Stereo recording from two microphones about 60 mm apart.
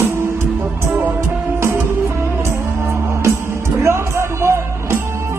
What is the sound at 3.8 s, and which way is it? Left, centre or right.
Music, right.